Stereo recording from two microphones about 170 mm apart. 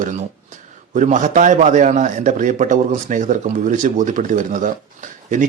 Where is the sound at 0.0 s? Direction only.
45° right (ahead or behind).